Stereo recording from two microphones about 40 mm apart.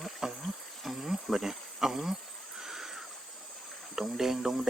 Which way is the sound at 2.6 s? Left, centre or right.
Centre.